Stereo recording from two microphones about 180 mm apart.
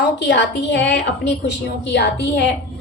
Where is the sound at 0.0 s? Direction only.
70° left (ahead or behind).